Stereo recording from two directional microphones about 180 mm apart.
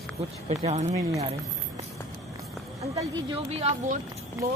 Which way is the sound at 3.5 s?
35° right (ahead or behind).